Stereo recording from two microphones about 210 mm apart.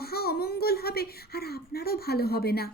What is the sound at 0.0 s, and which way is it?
A child's voice, 45° left (ahead or behind).